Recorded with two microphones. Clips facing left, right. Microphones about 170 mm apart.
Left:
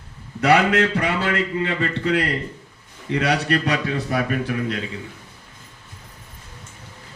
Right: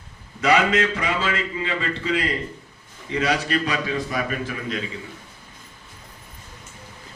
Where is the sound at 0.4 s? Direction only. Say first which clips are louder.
Left 2 dB; 60° left (ahead or behind).